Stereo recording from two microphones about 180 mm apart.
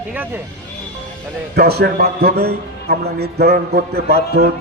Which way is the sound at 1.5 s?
60° right (ahead or behind).